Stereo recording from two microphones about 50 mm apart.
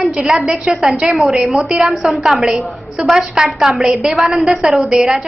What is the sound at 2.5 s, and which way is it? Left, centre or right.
A woman's voice, right.